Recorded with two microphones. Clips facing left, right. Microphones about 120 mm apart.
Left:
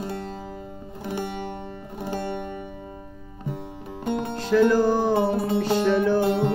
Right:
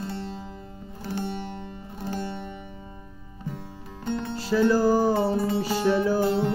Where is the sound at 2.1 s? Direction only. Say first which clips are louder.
Left 4 dB; 55° left (ahead or behind).